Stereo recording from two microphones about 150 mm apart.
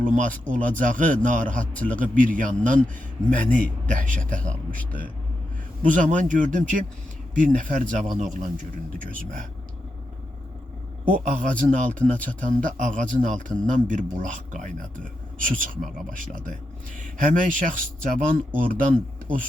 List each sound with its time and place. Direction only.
0.0 s a man's voice: 60° right (ahead or behind)
4.8 s speech: 10° left (ahead or behind)
5.8 s a man's voice: 60° right (ahead or behind)
9.0 s speech: 65° right (ahead or behind)
11.1 s a man's voice: 65° right (ahead or behind)